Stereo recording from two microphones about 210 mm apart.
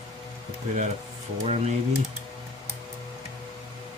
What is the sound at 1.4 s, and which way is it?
Speech, 30° right (ahead or behind).